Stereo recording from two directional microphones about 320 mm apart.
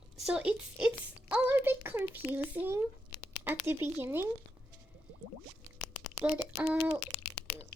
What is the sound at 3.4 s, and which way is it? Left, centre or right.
Speech, centre.